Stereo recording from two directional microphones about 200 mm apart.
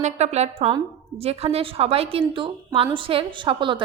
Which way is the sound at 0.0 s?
35° right (ahead or behind).